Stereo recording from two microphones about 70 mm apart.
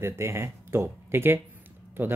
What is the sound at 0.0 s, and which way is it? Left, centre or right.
Speech, right.